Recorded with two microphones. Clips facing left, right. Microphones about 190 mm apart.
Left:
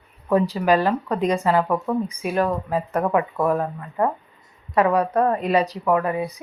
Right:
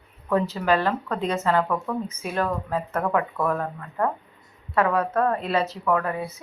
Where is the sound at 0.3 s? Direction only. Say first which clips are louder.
Left 4 dB; 15° left (ahead or behind).